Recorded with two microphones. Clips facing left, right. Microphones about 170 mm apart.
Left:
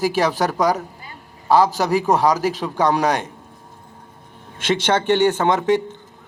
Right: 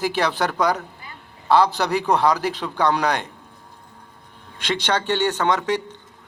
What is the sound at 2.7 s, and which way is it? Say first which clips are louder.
Speech: left 1 dB; 20° left (ahead or behind).